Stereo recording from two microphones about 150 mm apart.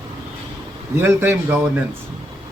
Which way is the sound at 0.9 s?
15° right (ahead or behind).